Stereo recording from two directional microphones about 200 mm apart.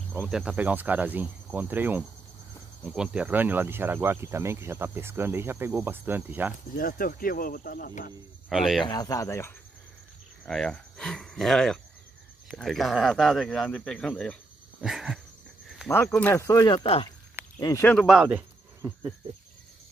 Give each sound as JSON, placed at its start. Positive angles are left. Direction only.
{"t": 0.1, "sound": "speech", "side_deg": -5}
{"t": 6.8, "sound": "speech", "side_deg": 45}
{"t": 8.5, "sound": "speech", "side_deg": 0}
{"t": 8.8, "sound": "speech", "side_deg": 20}
{"t": 10.4, "sound": "speech", "side_deg": 5}
{"t": 15.9, "sound": "speech", "side_deg": 10}
{"t": 17.6, "sound": "speech", "side_deg": 15}
{"t": 17.9, "sound": "speech", "side_deg": 0}